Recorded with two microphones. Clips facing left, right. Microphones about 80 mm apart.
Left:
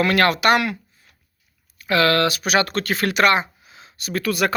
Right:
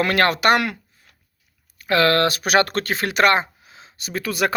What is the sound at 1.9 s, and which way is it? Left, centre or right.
Speech, right.